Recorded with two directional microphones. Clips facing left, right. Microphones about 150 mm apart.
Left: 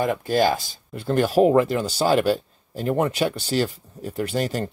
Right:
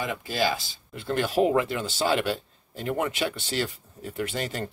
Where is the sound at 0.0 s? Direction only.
45° left (ahead or behind).